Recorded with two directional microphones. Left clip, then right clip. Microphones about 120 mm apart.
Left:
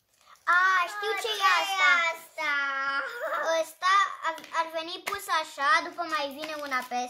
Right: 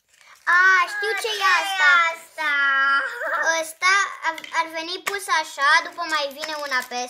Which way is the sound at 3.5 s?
75° right (ahead or behind).